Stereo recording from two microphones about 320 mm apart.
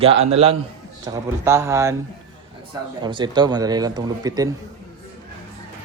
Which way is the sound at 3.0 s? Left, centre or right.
Centre.